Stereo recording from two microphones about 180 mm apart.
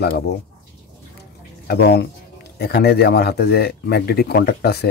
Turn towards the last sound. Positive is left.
turn(degrees=65)  # may be behind; listen again after turning